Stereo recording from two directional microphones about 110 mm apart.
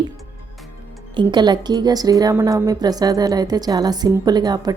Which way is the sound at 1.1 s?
40° right (ahead or behind).